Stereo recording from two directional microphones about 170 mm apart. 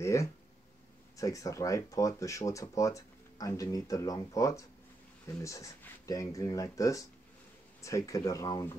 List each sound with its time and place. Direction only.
0.0 s speech: 15° left (ahead or behind)